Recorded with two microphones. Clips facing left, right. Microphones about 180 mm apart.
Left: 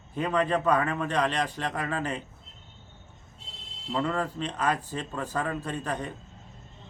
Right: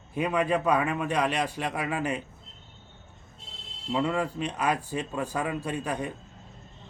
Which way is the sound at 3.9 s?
10° right (ahead or behind).